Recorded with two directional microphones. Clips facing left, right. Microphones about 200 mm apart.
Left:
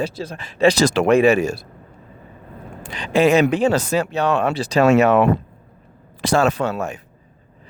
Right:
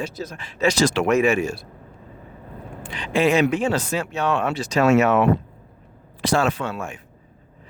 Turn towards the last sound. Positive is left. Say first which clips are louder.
# left 5 dB
turn(degrees=40)  # may be behind; listen again after turning